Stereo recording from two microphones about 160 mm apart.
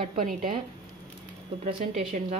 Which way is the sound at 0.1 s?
60° right (ahead or behind).